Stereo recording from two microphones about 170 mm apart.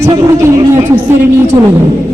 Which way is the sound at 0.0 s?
15° right (ahead or behind).